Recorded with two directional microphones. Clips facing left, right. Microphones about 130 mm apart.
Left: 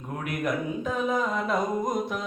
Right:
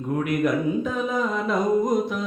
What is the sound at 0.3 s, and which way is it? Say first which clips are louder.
Speech: right 4 dB; 40° left (ahead or behind).